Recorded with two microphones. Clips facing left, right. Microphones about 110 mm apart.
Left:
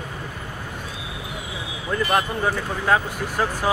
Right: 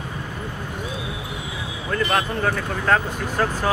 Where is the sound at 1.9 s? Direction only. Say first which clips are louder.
Even; 15° left (ahead or behind).